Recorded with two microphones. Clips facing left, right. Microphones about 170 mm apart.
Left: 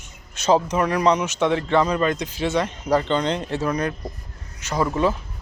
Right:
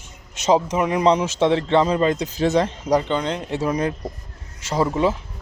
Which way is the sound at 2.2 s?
40° right (ahead or behind).